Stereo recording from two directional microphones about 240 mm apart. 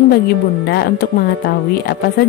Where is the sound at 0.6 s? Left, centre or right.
Left.